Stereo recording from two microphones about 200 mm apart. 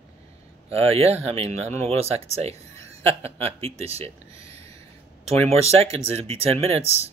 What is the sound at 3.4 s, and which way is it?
Speech, 30° right (ahead or behind).